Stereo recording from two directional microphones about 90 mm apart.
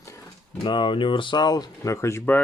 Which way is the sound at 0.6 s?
65° left (ahead or behind).